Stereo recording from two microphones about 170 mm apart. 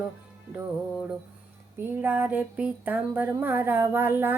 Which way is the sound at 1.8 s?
10° right (ahead or behind).